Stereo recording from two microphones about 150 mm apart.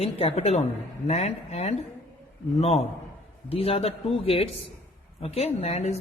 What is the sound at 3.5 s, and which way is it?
A woman's voice, 40° left (ahead or behind).